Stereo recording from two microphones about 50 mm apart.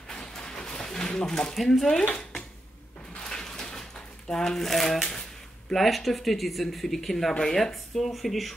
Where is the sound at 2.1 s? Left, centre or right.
Centre.